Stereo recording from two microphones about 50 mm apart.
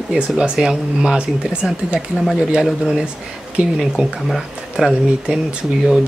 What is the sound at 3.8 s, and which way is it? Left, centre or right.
Speech, centre.